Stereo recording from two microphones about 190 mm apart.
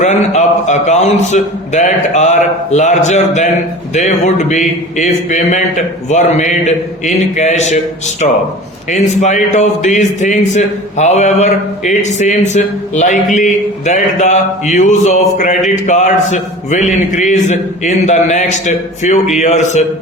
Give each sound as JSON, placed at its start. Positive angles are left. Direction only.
{"t": 0.0, "sound": "a man's voice", "side_deg": 40}
{"t": 8.9, "sound": "a man's voice", "side_deg": 40}